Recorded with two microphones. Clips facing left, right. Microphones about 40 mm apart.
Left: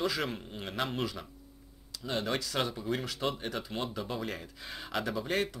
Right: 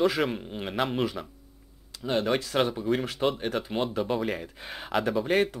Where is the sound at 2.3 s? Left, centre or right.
Right.